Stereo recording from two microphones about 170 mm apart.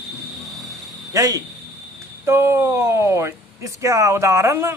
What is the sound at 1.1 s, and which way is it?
Speech, 20° right (ahead or behind).